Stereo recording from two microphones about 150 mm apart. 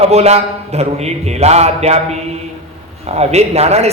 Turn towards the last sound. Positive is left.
turn(degrees=-45)  # may be behind; listen again after turning